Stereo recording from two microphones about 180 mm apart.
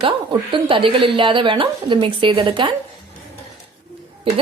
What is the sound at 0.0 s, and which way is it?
Speech, 30° right (ahead or behind).